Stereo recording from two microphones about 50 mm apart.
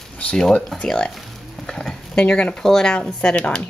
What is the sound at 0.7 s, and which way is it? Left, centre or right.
Speech, centre.